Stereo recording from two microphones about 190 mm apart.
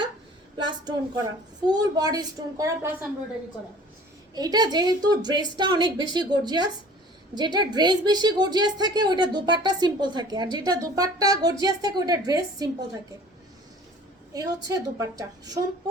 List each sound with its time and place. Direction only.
0.5 s a woman's voice: 20° right (ahead or behind)
4.4 s a woman's voice: 20° right (ahead or behind)
14.3 s a woman's voice: 20° right (ahead or behind)